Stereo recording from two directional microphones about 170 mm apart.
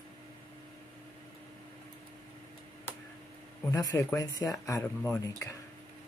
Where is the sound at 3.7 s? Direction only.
20° left (ahead or behind).